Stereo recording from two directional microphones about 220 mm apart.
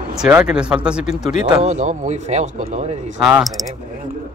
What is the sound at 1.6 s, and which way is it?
Speech, 30° right (ahead or behind).